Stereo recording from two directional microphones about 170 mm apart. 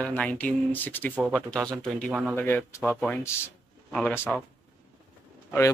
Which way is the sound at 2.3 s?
15° left (ahead or behind).